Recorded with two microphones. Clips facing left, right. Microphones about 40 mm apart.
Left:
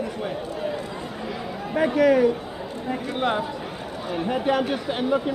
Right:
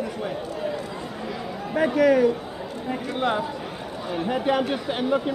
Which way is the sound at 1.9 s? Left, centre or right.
Left.